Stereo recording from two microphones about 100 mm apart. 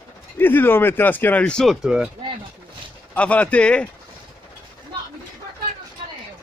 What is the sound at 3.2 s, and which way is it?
Speech, 15° left (ahead or behind).